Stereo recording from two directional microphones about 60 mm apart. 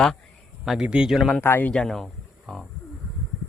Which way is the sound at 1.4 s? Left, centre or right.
Left.